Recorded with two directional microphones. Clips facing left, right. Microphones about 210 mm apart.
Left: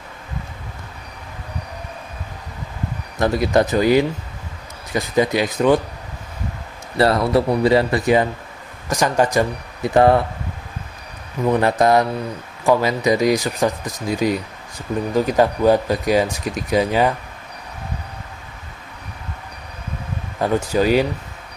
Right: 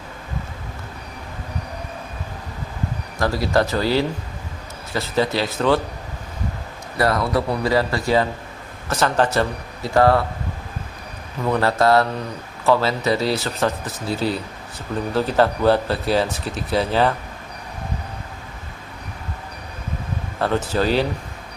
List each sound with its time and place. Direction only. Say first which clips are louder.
3.2 s speech: left 3 dB; 20° left (ahead or behind)
6.9 s speech: left 4 dB; 25° left (ahead or behind)
11.4 s speech: left 2 dB; 15° left (ahead or behind)
20.4 s speech: left 3 dB; 10° left (ahead or behind)